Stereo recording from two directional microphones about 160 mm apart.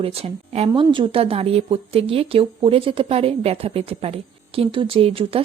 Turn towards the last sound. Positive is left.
turn(degrees=-35)  # may be behind; listen again after turning